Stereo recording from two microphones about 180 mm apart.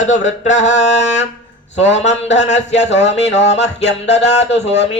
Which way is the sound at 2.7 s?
80° left.